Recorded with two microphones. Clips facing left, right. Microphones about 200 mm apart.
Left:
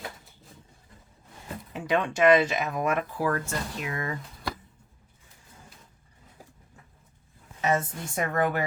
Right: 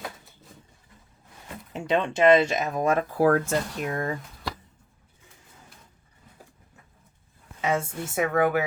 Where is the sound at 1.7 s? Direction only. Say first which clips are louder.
Right 2 dB; 25° right (ahead or behind).